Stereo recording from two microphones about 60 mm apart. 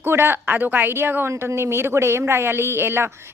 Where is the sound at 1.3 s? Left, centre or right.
Right.